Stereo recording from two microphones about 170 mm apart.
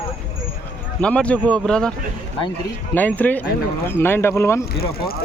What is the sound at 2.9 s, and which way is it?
Speech, 10° left (ahead or behind).